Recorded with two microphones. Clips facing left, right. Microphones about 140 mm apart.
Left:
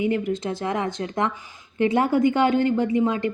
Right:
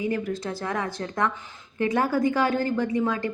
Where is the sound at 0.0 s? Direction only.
20° left (ahead or behind).